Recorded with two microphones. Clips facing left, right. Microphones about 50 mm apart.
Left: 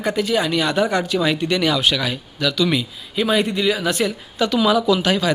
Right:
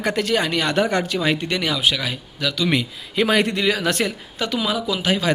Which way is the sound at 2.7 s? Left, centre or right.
Right.